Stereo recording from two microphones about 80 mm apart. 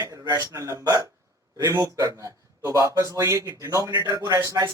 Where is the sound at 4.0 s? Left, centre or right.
Right.